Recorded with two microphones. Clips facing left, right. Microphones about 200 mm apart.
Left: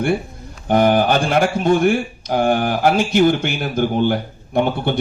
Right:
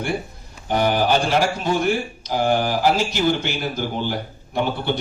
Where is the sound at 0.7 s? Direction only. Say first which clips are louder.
Left 4 dB; 50° left (ahead or behind).